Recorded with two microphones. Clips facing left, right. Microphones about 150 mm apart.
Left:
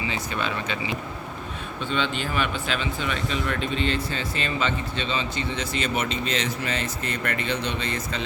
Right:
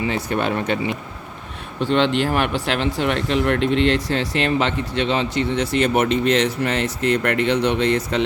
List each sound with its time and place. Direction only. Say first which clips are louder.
0.0 s speech: right 7 dB; 60° right (ahead or behind)
1.8 s speech: right 9 dB; 75° right (ahead or behind)